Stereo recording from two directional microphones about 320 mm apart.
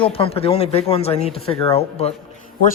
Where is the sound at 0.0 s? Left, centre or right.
Centre.